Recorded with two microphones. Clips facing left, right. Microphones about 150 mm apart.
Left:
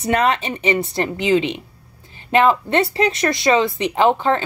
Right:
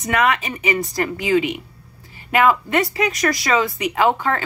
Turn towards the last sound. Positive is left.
turn(degrees=20)  # may be behind; listen again after turning